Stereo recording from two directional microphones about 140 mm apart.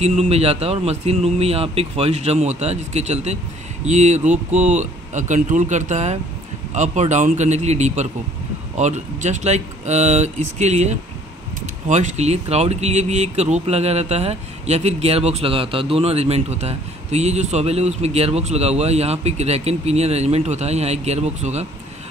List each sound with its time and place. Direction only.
0.0 s speech: 45° right (ahead or behind)